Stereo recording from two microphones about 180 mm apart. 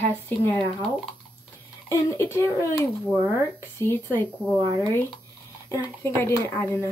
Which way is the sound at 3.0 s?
Centre (ahead or behind).